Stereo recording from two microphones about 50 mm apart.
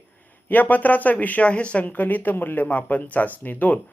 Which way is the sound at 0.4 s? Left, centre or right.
Left.